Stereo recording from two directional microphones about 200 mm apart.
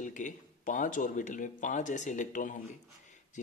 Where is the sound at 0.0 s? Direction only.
40° left (ahead or behind).